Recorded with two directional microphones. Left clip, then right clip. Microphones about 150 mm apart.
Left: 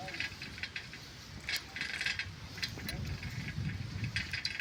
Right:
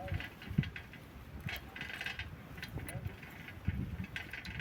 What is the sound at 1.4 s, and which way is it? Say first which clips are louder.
Mechanisms: left 6 dB; 15° right (ahead or behind).